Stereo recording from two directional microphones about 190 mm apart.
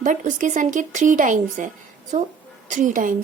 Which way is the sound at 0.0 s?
40° right (ahead or behind).